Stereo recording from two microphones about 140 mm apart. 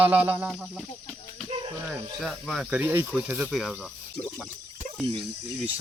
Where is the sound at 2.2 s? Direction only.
Centre (ahead or behind).